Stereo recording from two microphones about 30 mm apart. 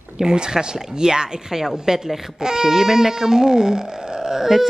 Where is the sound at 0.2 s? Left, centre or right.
Right.